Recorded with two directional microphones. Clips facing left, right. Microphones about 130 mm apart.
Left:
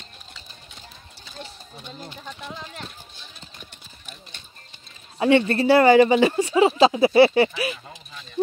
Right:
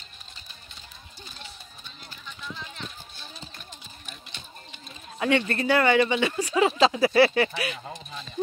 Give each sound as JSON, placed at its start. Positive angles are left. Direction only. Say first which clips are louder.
{"t": 5.2, "sound": "speech", "louder": "left 6 dB", "side_deg": 30}